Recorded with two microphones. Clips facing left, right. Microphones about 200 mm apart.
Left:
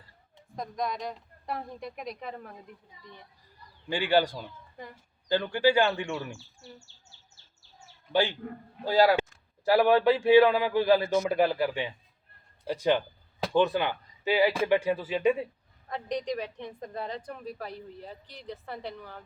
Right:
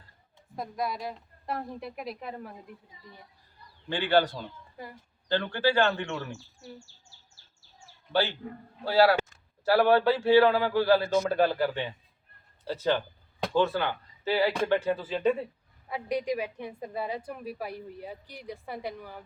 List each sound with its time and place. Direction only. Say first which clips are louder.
0.5 s a woman's voice: even; 5° right (ahead or behind)
3.8 s a man's voice: even; 10° left (ahead or behind)
8.1 s a man's voice: left 1 dB; 15° left (ahead or behind)
15.9 s a woman's voice: right 2 dB; 10° right (ahead or behind)